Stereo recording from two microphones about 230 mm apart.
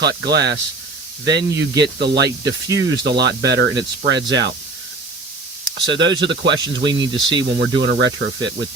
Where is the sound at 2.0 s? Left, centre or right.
Right.